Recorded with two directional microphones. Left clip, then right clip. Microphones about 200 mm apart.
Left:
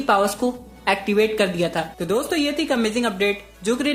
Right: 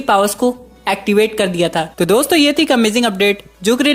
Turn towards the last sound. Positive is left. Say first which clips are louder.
# right 8 dB
turn(degrees=-40)  # may be behind; listen again after turning